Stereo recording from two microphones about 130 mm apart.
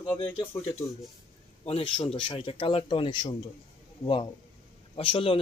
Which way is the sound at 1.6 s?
50° left (ahead or behind).